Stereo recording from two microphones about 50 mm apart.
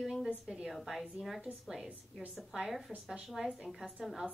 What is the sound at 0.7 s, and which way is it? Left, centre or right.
Speech, centre.